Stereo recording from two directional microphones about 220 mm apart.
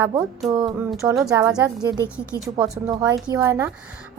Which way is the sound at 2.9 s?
15° right (ahead or behind).